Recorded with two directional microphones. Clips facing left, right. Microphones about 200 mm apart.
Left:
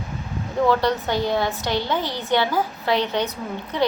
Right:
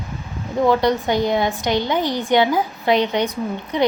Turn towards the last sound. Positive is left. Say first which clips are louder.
# right 4 dB
turn(degrees=-15)  # may be behind; listen again after turning